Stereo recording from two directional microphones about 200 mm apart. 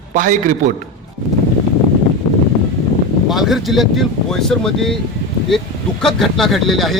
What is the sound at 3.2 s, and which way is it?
Speech, centre (ahead or behind).